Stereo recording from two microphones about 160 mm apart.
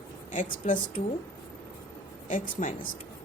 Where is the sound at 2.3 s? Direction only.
50° left (ahead or behind).